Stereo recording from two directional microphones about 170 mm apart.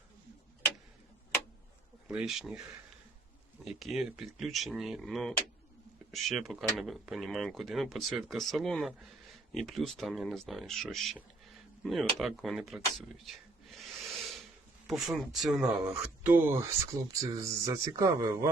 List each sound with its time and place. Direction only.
2.0 s speech: 5° right (ahead or behind)
13.2 s a sound: centre (ahead or behind)
14.8 s speech: centre (ahead or behind)
15.9 s speech: 15° right (ahead or behind)